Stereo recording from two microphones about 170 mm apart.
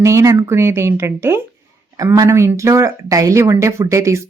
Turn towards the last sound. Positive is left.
turn(degrees=-15)  # may be behind; listen again after turning